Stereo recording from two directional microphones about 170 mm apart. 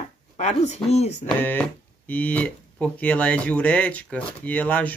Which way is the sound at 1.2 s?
10° left (ahead or behind).